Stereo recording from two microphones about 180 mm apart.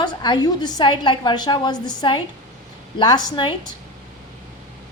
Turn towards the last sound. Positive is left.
turn(degrees=25)  # may be behind; listen again after turning